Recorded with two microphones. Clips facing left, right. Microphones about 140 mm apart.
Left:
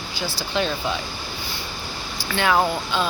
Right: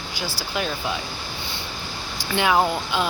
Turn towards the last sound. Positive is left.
turn(degrees=-15)  # may be behind; listen again after turning